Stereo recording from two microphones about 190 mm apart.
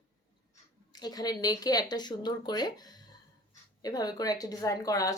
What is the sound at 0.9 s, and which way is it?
Speech, 20° left (ahead or behind).